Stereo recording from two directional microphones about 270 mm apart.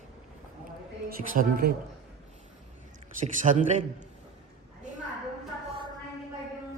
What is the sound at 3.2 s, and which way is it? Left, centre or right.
Speech, right.